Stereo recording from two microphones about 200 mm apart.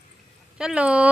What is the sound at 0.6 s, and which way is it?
Speech, 5° right (ahead or behind).